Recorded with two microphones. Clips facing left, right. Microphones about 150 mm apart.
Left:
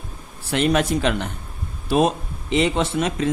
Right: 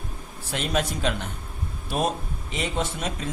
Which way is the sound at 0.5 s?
75° left (ahead or behind).